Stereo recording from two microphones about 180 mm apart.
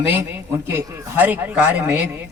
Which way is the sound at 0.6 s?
15° right (ahead or behind).